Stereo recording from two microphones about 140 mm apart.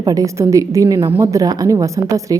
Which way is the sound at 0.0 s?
25° right (ahead or behind).